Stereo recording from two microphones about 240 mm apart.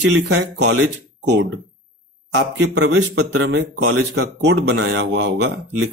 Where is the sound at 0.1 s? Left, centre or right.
Right.